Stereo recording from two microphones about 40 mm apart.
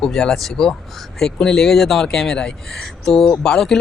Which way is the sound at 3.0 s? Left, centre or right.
Centre.